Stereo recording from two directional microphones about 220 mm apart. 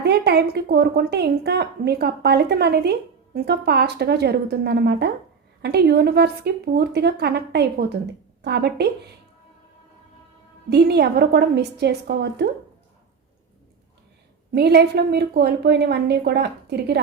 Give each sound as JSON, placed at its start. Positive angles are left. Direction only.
{"t": 0.0, "sound": "a woman's voice", "side_deg": -50}
{"t": 10.7, "sound": "a woman's voice", "side_deg": -50}
{"t": 14.5, "sound": "a woman's voice", "side_deg": -45}